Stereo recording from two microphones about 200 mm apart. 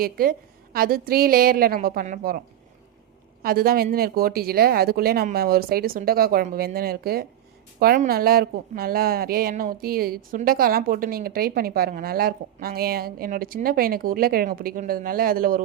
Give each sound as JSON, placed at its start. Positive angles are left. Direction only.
{"t": 0.0, "sound": "a woman's voice", "side_deg": -45}
{"t": 3.4, "sound": "a woman's voice", "side_deg": -50}